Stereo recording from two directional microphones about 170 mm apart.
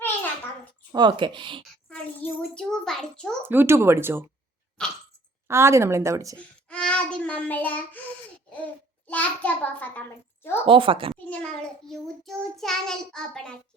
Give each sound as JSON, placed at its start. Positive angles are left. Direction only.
{"t": 0.9, "sound": "speech", "side_deg": -25}
{"t": 1.9, "sound": "a sound", "side_deg": 5}
{"t": 3.4, "sound": "speech", "side_deg": -10}
{"t": 4.8, "sound": "a sound", "side_deg": 5}
{"t": 5.5, "sound": "speech", "side_deg": -15}
{"t": 6.3, "sound": "child singing", "side_deg": 5}
{"t": 9.0, "sound": "a child's voice", "side_deg": 10}
{"t": 10.7, "sound": "speech", "side_deg": -30}
{"t": 11.1, "sound": "child singing", "side_deg": 5}